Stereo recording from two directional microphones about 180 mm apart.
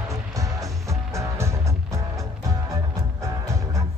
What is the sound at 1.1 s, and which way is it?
Music, 15° right (ahead or behind).